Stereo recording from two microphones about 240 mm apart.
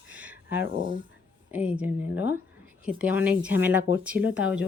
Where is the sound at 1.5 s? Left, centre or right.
Centre.